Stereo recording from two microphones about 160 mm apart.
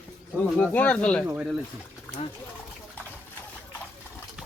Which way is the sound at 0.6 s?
10° left (ahead or behind).